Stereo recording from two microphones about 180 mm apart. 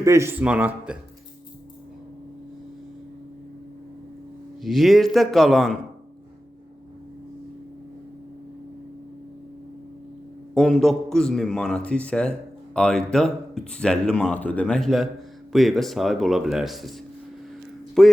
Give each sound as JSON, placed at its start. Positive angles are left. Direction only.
{"t": 0.0, "sound": "speech", "side_deg": -15}
{"t": 4.6, "sound": "a man's voice", "side_deg": 0}
{"t": 10.5, "sound": "a man's voice", "side_deg": 0}
{"t": 18.0, "sound": "a man's voice", "side_deg": 5}